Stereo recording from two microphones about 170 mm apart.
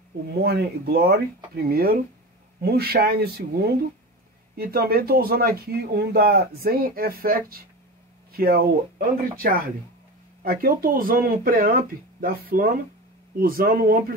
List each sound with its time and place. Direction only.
0.4 s speech: 65° right (ahead or behind)